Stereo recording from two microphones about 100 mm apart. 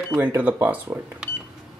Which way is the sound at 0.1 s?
15° right (ahead or behind).